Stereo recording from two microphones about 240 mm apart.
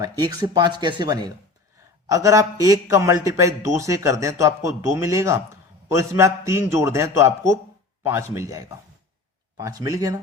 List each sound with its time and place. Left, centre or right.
0.0 s a man's voice: centre